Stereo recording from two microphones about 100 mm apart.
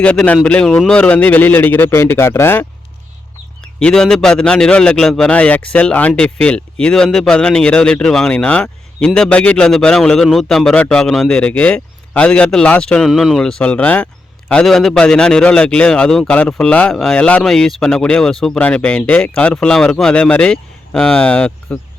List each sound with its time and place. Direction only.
0.0 s a man's voice: 15° left (ahead or behind)
3.6 s a man's voice: 10° left (ahead or behind)